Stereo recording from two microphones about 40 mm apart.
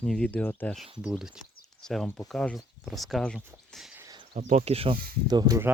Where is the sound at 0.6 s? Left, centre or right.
Left.